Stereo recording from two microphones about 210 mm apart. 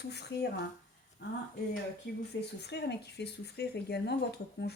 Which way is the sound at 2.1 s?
50° left (ahead or behind).